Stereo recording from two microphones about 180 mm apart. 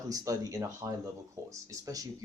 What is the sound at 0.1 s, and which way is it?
Speech, 20° right (ahead or behind).